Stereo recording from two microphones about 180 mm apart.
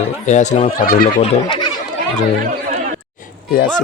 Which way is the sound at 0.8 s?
50° left (ahead or behind).